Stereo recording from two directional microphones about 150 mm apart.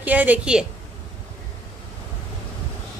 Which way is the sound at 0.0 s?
10° right (ahead or behind).